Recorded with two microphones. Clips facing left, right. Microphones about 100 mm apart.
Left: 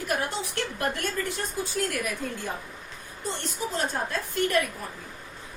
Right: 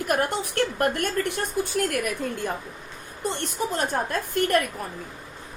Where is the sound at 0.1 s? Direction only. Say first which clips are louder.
Right 5 dB; 55° right (ahead or behind).